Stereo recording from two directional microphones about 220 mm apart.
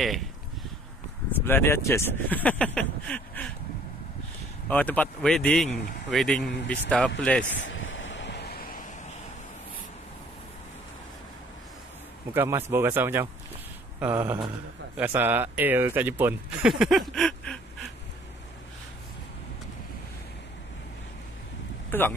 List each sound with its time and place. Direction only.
0.0 s speech: centre (ahead or behind)
1.4 s speech: 10° left (ahead or behind)
4.6 s speech: 5° left (ahead or behind)
7.4 s a sound: 60° left (ahead or behind); by 8.8 s 45° left (ahead or behind)
12.4 s speech: 10° right (ahead or behind)
21.9 s speech: 10° left (ahead or behind)